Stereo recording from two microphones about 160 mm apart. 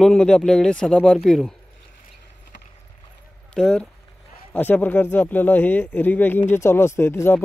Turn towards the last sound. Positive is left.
turn(degrees=15)  # may be behind; listen again after turning